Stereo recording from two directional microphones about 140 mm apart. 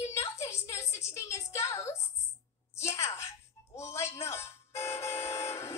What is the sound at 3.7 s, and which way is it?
Toot, 20° left (ahead or behind).